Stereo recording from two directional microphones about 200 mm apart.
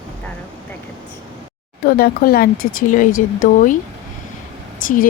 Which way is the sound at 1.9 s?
50° left (ahead or behind).